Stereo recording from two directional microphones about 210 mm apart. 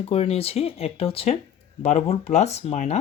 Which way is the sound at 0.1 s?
30° left (ahead or behind).